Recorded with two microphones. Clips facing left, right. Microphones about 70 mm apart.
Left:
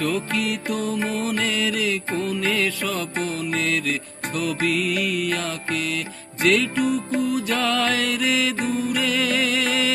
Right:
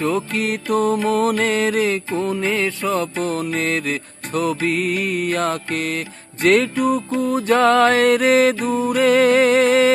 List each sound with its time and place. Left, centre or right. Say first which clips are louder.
0.3 s mantra: right 5 dB; right
2.1 s music: right 3 dB; right
3.2 s mantra: right 5 dB; right
3.6 s music: right 2 dB; right